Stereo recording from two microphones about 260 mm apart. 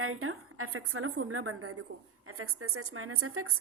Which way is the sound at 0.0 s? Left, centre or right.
Right.